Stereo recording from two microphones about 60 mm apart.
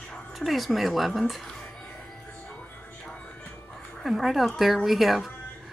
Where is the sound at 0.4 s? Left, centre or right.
Centre.